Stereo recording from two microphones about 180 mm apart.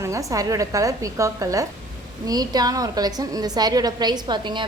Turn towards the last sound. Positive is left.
turn(degrees=-25)  # may be behind; listen again after turning